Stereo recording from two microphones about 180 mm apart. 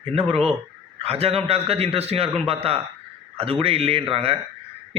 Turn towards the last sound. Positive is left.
turn(degrees=-30)  # may be behind; listen again after turning